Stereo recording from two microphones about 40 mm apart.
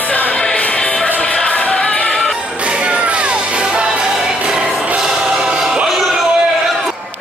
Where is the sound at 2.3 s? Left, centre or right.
Right.